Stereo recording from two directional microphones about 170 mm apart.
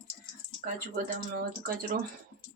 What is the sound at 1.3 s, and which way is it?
Speech, 60° right (ahead or behind).